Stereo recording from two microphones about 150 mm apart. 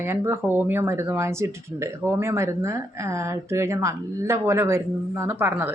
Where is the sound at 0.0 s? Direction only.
15° right (ahead or behind).